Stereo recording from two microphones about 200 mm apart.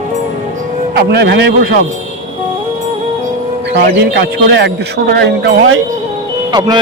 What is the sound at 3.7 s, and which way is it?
A man's voice, 55° right (ahead or behind).